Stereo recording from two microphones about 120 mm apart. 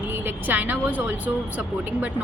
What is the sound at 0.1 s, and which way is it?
A woman's voice, 15° right (ahead or behind).